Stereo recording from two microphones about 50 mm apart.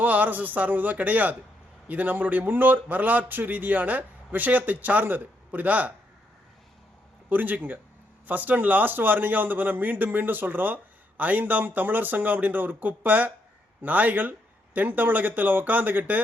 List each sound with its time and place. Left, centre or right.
0.0 s a man's voice: right
7.3 s a man's voice: right